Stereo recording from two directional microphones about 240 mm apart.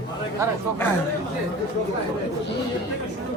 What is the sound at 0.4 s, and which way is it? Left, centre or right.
Speech, centre.